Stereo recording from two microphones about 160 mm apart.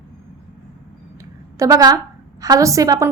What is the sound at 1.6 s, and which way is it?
A woman's voice, 20° right (ahead or behind).